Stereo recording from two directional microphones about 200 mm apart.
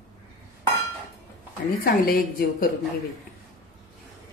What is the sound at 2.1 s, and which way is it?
Speech, 45° left (ahead or behind).